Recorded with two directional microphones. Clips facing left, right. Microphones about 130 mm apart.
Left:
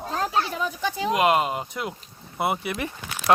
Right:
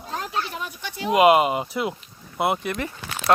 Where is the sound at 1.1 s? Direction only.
5° right (ahead or behind).